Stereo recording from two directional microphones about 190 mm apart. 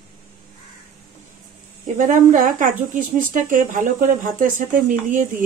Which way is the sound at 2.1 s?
40° right (ahead or behind).